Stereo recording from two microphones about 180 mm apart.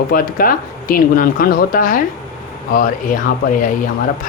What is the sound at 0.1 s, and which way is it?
Speech, 55° left (ahead or behind).